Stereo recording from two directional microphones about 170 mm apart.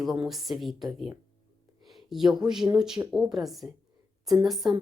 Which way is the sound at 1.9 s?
Centre (ahead or behind).